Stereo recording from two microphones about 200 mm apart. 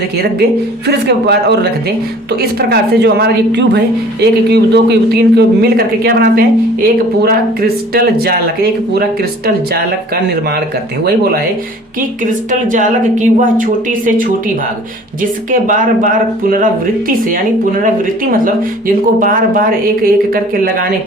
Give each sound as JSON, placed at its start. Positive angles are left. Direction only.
{"t": 0.9, "sound": "a man's voice", "side_deg": -55}
{"t": 11.0, "sound": "speech", "side_deg": -50}
{"t": 12.2, "sound": "a woman's voice", "side_deg": -40}
{"t": 17.8, "sound": "speech", "side_deg": -45}